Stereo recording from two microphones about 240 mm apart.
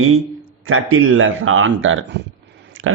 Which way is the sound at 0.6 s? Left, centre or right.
Right.